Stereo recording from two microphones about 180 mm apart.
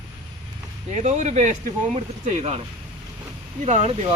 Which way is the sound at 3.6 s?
40° right (ahead or behind).